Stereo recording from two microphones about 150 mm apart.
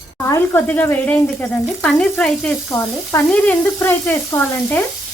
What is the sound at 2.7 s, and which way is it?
Speech, 20° left (ahead or behind).